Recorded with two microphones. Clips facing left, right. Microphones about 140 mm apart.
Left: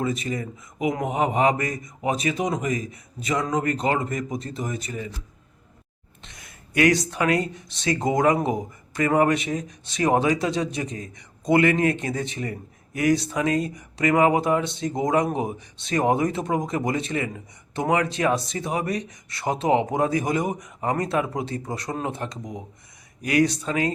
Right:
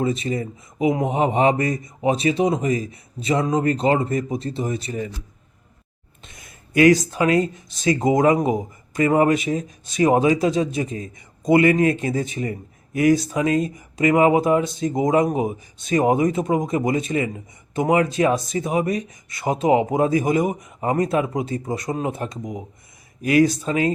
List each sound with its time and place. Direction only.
0.0 s a man's voice: 30° right (ahead or behind)
6.3 s a sound: 25° right (ahead or behind)
7.0 s a man's voice: 25° right (ahead or behind)